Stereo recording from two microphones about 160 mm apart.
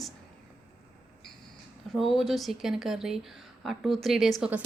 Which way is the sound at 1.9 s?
Centre (ahead or behind).